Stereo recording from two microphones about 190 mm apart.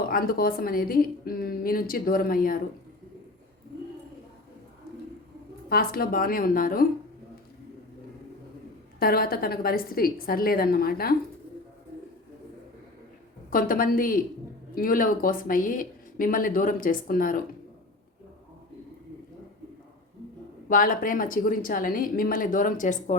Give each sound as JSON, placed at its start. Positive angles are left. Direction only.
{"t": 0.1, "sound": "speech", "side_deg": 50}
{"t": 5.6, "sound": "speech", "side_deg": 50}
{"t": 9.0, "sound": "speech", "side_deg": 50}
{"t": 13.5, "sound": "speech", "side_deg": 50}
{"t": 20.7, "sound": "speech", "side_deg": 45}